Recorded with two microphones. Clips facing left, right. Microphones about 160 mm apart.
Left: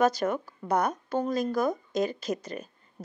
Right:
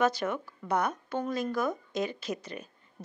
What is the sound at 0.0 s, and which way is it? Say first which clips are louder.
Speech: left 3 dB; 40° left (ahead or behind).